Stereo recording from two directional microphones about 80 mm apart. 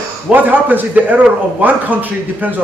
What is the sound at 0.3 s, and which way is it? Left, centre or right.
A man's voice, right.